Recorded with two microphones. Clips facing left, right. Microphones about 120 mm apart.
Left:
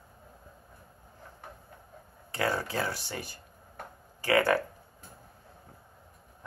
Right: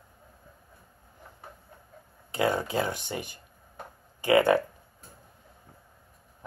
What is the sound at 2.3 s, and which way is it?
Speech, 20° right (ahead or behind).